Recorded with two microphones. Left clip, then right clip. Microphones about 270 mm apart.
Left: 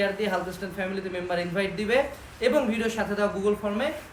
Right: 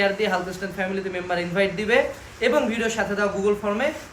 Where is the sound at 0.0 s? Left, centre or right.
Centre.